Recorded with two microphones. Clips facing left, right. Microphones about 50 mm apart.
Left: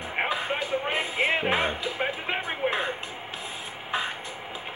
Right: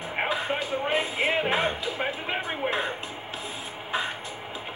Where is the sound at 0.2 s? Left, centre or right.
Left.